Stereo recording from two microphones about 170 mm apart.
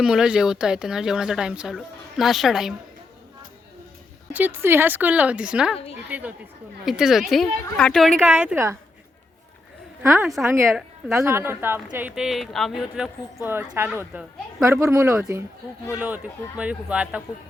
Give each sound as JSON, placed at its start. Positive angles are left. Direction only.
{"t": 0.0, "sound": "speech", "side_deg": -5}
{"t": 4.3, "sound": "a woman's voice", "side_deg": -10}
{"t": 10.0, "sound": "a woman's voice", "side_deg": -15}